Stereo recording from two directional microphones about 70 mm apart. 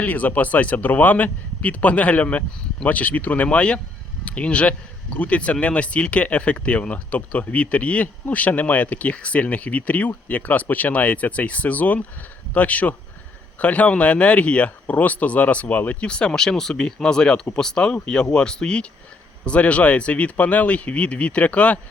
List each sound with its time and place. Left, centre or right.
0.0 s speech: left